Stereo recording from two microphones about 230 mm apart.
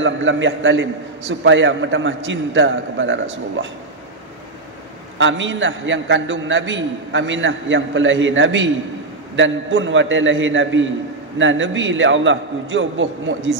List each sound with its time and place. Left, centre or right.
0.0 s a man's voice: right
5.2 s a man's voice: right